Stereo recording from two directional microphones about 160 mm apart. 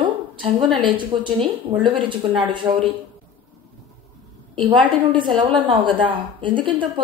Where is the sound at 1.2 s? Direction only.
30° right (ahead or behind).